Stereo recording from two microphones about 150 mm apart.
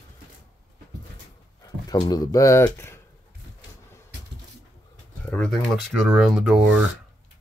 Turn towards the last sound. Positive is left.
turn(degrees=-5)  # may be behind; listen again after turning